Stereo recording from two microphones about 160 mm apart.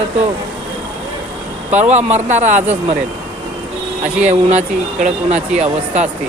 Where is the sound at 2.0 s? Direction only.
45° right (ahead or behind).